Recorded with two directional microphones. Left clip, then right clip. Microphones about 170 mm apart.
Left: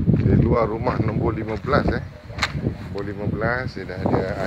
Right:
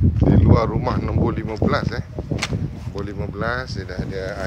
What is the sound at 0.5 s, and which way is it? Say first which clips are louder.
Speech: right 1 dB; 5° right (ahead or behind).